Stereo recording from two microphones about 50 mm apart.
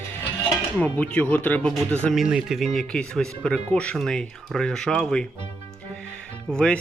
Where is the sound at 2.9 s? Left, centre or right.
Centre.